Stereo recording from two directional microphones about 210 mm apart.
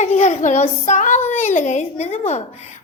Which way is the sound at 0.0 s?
35° left (ahead or behind).